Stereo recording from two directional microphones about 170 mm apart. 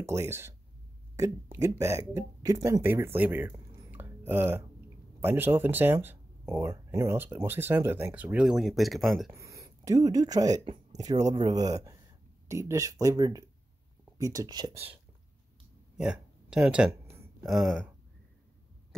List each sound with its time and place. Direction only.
0.0 s speech: 15° right (ahead or behind); by 9.3 s centre (ahead or behind)
9.3 s speech: 20° right (ahead or behind)
10.6 s speech: 30° right (ahead or behind)
16.0 s speech: 5° right (ahead or behind)